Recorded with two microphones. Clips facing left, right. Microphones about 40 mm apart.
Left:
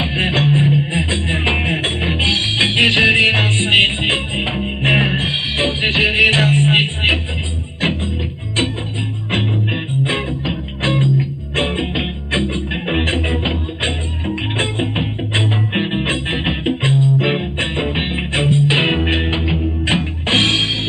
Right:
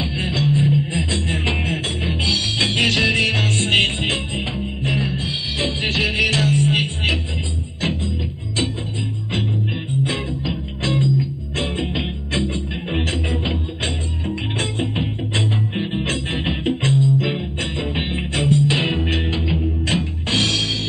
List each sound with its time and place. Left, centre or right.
0.0 s music: left
0.9 s music: left
4.4 s music: left
10.0 s music: left